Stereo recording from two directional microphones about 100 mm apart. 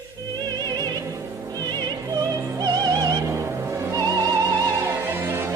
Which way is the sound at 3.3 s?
25° right (ahead or behind).